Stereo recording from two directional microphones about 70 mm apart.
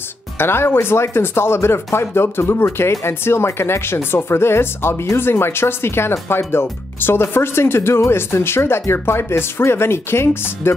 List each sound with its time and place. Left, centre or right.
0.4 s speech: left